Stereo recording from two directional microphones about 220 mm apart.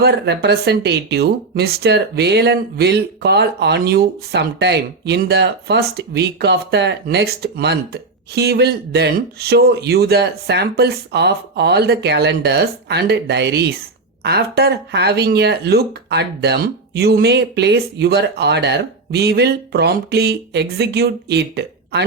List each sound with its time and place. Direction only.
0.0 s speech: 50° right (ahead or behind)